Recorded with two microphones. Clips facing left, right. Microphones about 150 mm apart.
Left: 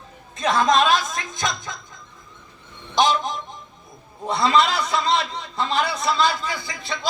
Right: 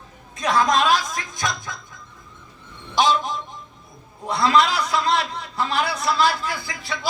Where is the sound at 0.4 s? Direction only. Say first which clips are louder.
Left 1 dB; centre (ahead or behind).